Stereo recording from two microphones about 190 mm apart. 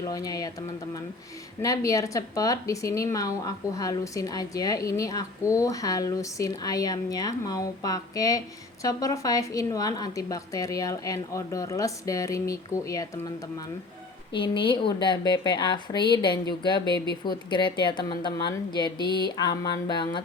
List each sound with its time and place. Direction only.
0.0 s speech: 20° left (ahead or behind)
1.6 s speech: 15° left (ahead or behind)
14.3 s speech: 25° left (ahead or behind)